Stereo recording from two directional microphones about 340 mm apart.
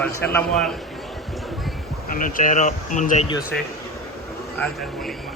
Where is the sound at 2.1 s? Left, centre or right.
Left.